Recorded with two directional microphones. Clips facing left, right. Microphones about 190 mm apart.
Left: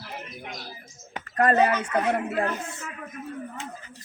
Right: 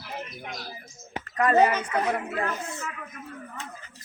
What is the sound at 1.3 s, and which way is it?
Speech, 50° left (ahead or behind).